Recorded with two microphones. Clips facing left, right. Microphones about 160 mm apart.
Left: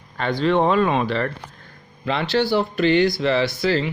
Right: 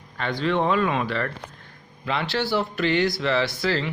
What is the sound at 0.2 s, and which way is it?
A man's voice, 35° left (ahead or behind).